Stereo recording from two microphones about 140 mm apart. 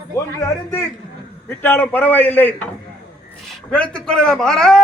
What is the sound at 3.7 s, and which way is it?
A man's voice, 5° left (ahead or behind).